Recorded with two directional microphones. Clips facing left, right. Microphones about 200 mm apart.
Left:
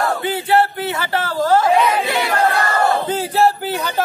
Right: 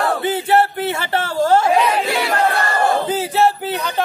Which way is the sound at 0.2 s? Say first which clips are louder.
Right 1 dB; 20° right (ahead or behind).